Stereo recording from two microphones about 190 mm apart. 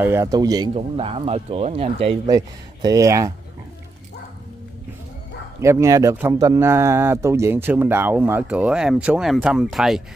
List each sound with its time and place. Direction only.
0.0 s speech: 15° right (ahead or behind)
0.7 s speech: 30° right (ahead or behind)
2.3 s speech: 20° right (ahead or behind)
5.6 s speech: 15° right (ahead or behind)